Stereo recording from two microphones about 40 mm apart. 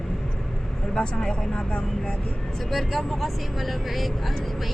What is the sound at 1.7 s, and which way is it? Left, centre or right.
Speech, left.